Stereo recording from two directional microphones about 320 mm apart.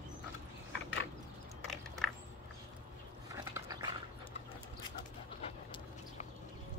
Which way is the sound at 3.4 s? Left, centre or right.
Centre.